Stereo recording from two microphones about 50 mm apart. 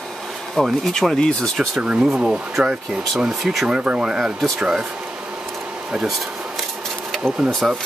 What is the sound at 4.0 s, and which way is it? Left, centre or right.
Speech, centre.